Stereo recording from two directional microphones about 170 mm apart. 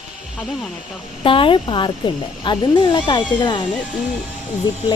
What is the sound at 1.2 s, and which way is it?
Speech, 30° left (ahead or behind).